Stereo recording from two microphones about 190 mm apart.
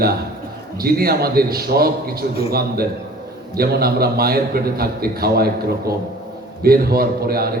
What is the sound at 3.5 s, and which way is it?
A man's voice, 55° right (ahead or behind).